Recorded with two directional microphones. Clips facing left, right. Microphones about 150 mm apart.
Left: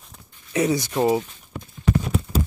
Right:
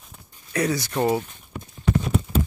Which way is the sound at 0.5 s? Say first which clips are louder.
Left 3 dB; 20° left (ahead or behind).